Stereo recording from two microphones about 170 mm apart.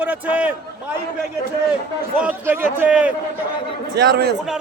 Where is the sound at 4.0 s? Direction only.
70° right (ahead or behind).